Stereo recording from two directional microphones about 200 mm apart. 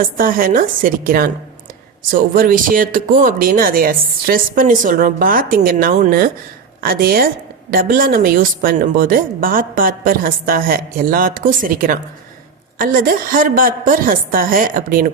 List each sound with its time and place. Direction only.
0.0 s speech: 45° right (ahead or behind)